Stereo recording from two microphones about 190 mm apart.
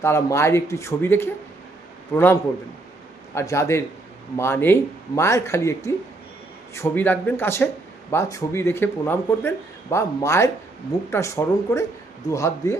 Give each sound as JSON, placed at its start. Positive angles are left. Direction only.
{"t": 0.0, "sound": "speech", "side_deg": 15}